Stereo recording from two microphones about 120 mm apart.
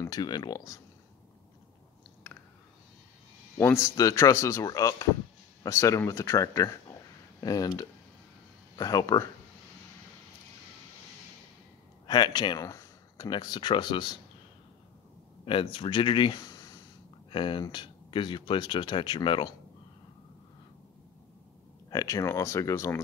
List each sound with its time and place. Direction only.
0.0 s speech: 35° left (ahead or behind)
2.3 s a sound: 15° left (ahead or behind)
3.5 s speech: 20° left (ahead or behind)
8.7 s speech: 30° left (ahead or behind)
12.1 s speech: 35° left (ahead or behind)
13.3 s speech: 40° left (ahead or behind)
15.4 s speech: 45° left (ahead or behind)
17.3 s speech: 45° left (ahead or behind)
21.9 s speech: 25° left (ahead or behind)